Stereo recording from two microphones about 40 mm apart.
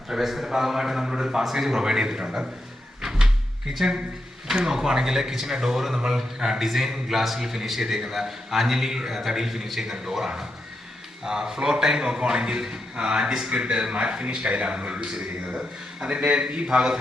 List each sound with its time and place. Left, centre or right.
0.1 s speech: centre
3.0 s cupboard open or close: centre
3.8 s speech: centre